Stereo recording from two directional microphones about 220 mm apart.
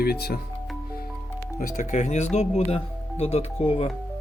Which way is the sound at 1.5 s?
35° left (ahead or behind).